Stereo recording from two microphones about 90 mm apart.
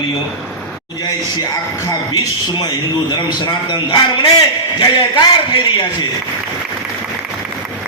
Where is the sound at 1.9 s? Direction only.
45° left (ahead or behind).